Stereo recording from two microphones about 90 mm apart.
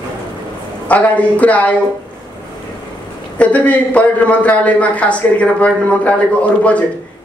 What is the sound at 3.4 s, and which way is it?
Speech, 15° left (ahead or behind).